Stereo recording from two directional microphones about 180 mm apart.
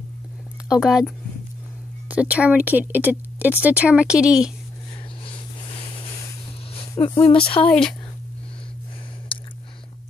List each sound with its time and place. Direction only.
0.7 s speech: centre (ahead or behind)
5.2 s a sound: 30° left (ahead or behind)
6.7 s speech: 30° left (ahead or behind)
7.6 s speech: 5° left (ahead or behind)